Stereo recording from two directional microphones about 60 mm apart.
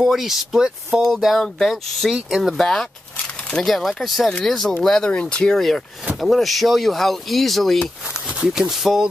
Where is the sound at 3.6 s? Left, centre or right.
Centre.